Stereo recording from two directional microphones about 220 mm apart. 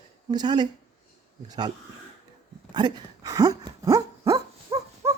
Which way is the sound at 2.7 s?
20° right (ahead or behind).